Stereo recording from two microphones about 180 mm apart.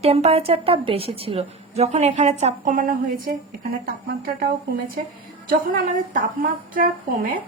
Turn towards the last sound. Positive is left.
turn(degrees=-50)  # may be behind; listen again after turning